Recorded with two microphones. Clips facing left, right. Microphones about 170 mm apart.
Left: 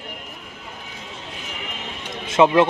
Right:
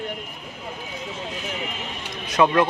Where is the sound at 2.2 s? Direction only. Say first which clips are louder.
Left 3 dB; 25° left (ahead or behind).